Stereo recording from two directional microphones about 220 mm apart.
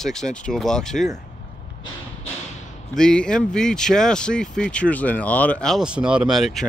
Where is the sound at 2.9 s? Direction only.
5° left (ahead or behind).